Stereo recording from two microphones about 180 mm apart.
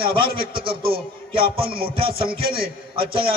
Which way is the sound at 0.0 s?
30° right (ahead or behind).